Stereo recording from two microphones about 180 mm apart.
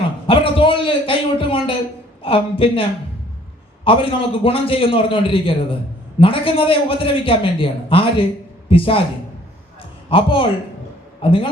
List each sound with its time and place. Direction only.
0.3 s a man's voice: 30° left (ahead or behind)
3.8 s a man's voice: 30° left (ahead or behind)
10.1 s a man's voice: 30° left (ahead or behind)